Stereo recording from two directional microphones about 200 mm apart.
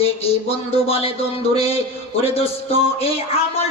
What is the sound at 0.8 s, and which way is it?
A man's voice, 30° left (ahead or behind).